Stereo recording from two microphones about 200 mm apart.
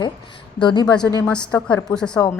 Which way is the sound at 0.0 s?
20° left (ahead or behind).